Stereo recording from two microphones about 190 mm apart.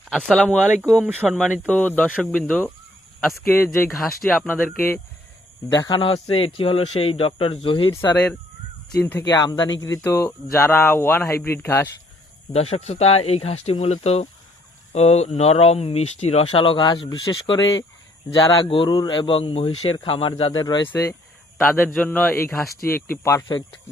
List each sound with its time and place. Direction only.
0.1 s speech: 5° left (ahead or behind)
1.6 s speech: 10° left (ahead or behind)
3.8 s speech: centre (ahead or behind); by 7.9 s 30° left (ahead or behind)
8.1 s speech: 5° left (ahead or behind)
12.5 s speech: 35° left (ahead or behind)
18.4 s speech: 25° left (ahead or behind)